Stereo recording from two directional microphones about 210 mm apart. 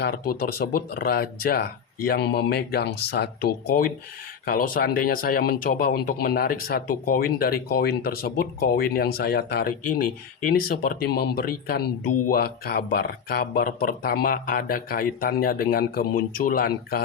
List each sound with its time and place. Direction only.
0.0 s speech: 45° left (ahead or behind)